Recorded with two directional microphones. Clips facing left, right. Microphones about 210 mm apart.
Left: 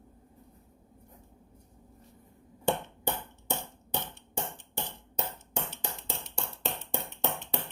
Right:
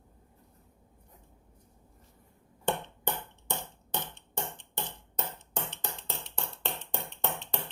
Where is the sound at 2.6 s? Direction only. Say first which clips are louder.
Left 2 dB; 10° left (ahead or behind).